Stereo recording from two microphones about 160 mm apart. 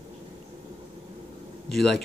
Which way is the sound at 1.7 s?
Centre (ahead or behind).